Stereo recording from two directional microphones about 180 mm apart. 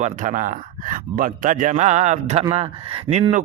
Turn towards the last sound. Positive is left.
turn(degrees=-35)  # may be behind; listen again after turning